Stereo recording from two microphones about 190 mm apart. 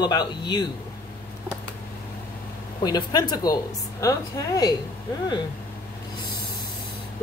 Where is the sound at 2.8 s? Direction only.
20° left (ahead or behind).